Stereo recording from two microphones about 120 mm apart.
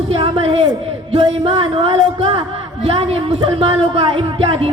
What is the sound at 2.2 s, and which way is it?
A man's voice, 55° right (ahead or behind).